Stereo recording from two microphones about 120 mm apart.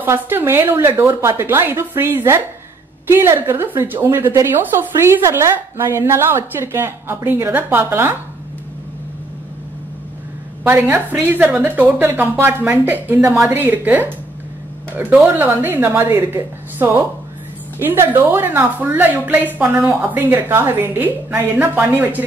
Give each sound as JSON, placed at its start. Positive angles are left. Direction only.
{"t": 0.0, "sound": "a woman's voice", "side_deg": -15}
{"t": 10.6, "sound": "a woman's voice", "side_deg": -15}